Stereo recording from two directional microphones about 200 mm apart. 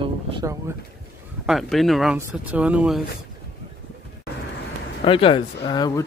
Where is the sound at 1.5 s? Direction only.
Centre (ahead or behind).